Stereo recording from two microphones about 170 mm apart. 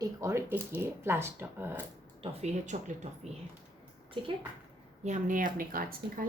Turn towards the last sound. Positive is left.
turn(degrees=-55)  # may be behind; listen again after turning